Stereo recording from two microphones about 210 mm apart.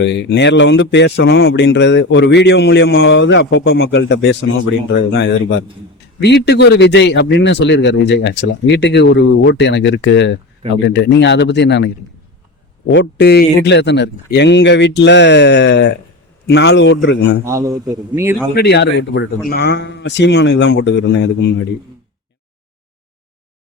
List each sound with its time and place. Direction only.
0.0 s speech: 55° left (ahead or behind)
12.9 s speech: 55° left (ahead or behind)
17.4 s a man's voice: 15° right (ahead or behind)
18.5 s a man's voice: 50° left (ahead or behind)